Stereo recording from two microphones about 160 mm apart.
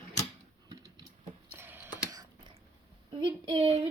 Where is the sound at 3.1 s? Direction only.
35° right (ahead or behind).